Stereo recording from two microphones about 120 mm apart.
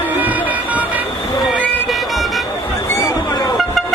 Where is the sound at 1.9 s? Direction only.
Centre (ahead or behind).